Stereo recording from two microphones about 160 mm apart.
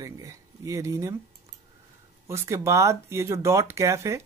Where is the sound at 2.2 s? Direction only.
20° right (ahead or behind).